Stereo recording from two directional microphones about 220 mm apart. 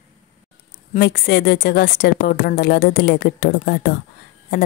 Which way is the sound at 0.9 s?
45° left (ahead or behind).